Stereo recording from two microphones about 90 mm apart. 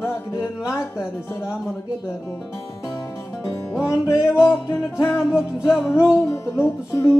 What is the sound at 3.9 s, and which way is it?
Music, 30° left (ahead or behind).